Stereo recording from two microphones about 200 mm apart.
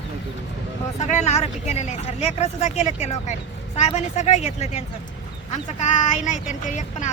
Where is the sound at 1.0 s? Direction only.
35° left (ahead or behind).